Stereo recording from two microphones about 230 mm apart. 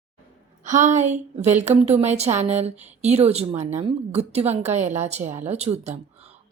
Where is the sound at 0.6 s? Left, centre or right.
Right.